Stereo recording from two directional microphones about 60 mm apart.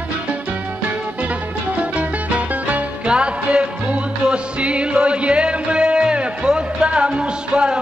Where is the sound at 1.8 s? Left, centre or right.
Right.